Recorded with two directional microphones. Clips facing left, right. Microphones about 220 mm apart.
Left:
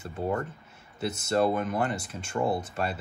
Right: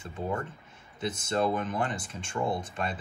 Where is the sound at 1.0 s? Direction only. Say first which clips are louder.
Left 3 dB; 5° left (ahead or behind).